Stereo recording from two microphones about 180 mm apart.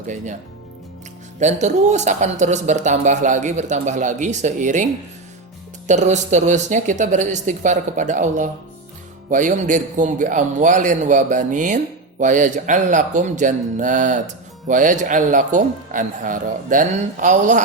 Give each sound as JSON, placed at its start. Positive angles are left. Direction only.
{"t": 1.4, "sound": "speech", "side_deg": -40}
{"t": 5.9, "sound": "speech", "side_deg": -40}